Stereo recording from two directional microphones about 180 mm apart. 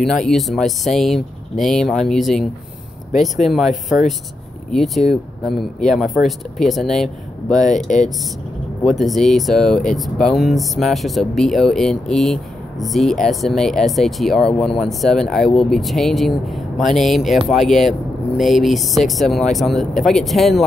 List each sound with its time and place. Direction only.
0.0 s speech: centre (ahead or behind)
7.5 s speech: 40° left (ahead or behind)
8.8 s speech: centre (ahead or behind)